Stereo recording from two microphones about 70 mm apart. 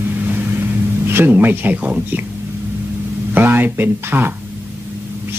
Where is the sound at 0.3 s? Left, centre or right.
Right.